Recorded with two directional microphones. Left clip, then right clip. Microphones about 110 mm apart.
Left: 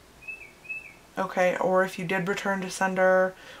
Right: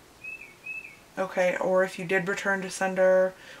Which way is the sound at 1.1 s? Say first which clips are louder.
Left 1 dB; 25° left (ahead or behind).